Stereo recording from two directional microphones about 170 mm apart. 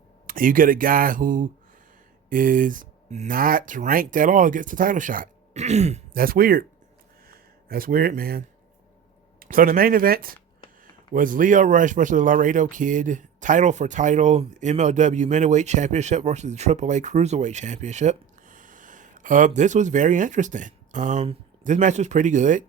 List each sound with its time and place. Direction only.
0.3 s speech: 55° right (ahead or behind)
6.1 s speech: 60° right (ahead or behind)